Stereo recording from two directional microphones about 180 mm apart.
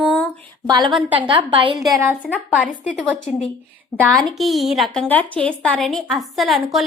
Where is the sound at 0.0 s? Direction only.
10° left (ahead or behind).